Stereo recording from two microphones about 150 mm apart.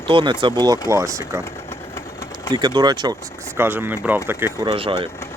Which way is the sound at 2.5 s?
30° right (ahead or behind).